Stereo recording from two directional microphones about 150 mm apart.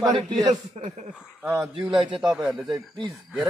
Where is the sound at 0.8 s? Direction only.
45° right (ahead or behind).